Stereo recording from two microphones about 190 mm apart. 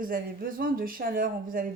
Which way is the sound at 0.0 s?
50° right (ahead or behind).